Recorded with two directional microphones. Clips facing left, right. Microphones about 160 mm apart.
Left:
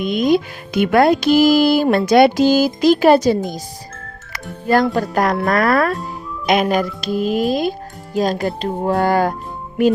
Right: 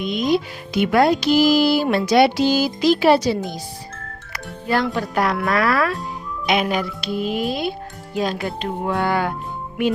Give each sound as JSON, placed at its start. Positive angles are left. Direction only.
{"t": 0.0, "sound": "speech", "side_deg": 50}
{"t": 4.7, "sound": "speech", "side_deg": 40}